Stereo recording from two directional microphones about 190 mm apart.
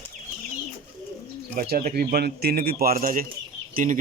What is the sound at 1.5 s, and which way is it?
A man's voice, 50° right (ahead or behind).